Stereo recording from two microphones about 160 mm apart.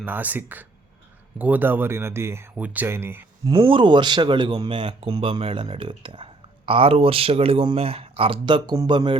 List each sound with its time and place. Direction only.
0.0 s speech: 10° right (ahead or behind)
3.5 s speech: 30° right (ahead or behind)